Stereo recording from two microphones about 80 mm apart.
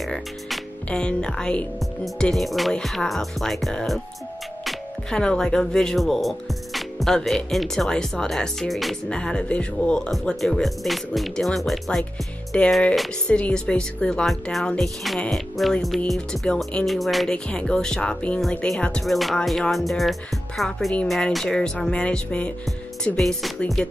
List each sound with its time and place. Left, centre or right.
0.0 s music: centre
0.8 s speech: centre
9.1 s speech: centre
12.5 s speech: centre
17.5 s speech: centre
19.0 s speech: centre
23.0 s speech: centre